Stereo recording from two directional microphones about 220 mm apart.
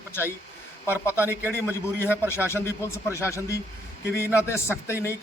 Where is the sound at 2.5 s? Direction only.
10° left (ahead or behind).